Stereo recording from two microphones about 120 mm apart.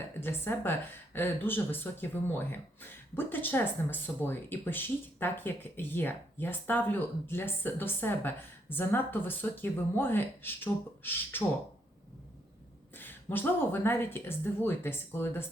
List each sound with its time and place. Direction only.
0.2 s a woman's voice: 20° left (ahead or behind)
13.0 s speech: 15° left (ahead or behind)